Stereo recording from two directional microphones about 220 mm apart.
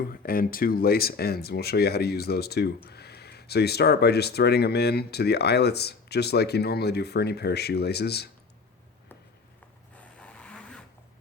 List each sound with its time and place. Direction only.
0.1 s speech: 40° left (ahead or behind)
10.2 s vehicle: 5° left (ahead or behind)